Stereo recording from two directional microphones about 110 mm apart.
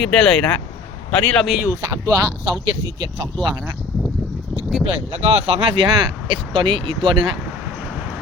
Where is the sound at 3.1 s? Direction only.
50° right (ahead or behind).